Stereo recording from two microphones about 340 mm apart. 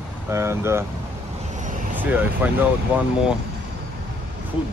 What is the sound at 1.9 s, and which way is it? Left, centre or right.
Speech, centre.